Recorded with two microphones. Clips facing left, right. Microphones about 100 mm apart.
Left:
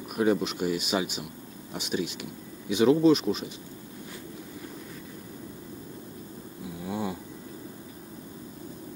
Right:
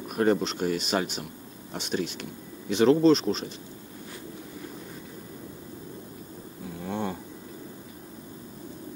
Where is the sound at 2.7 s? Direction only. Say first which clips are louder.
Right 1 dB; 10° left (ahead or behind).